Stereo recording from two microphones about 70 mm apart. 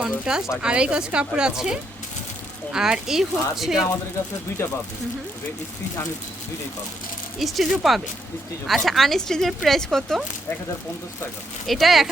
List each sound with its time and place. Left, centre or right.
0.0 s speech: centre
4.6 s speech: left
7.3 s speech: centre
11.6 s speech: centre